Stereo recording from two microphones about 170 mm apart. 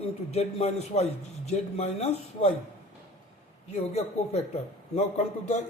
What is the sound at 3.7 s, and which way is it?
A man's voice, 40° left (ahead or behind).